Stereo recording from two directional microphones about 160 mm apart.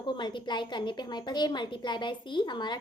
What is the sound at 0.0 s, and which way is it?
A woman's voice, 30° left (ahead or behind).